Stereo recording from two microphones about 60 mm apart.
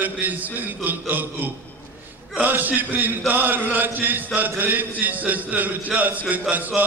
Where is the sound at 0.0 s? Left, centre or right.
Right.